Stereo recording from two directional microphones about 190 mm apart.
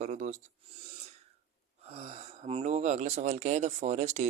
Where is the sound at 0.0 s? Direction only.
40° right (ahead or behind).